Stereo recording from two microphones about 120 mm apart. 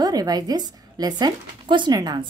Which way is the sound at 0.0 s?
30° right (ahead or behind).